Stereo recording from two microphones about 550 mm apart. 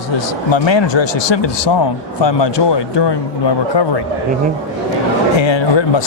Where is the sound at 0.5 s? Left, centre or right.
Left.